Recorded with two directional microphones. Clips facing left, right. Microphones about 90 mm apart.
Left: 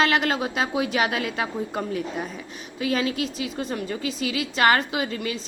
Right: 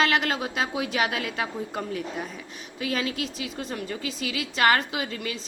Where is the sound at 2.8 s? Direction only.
25° left (ahead or behind).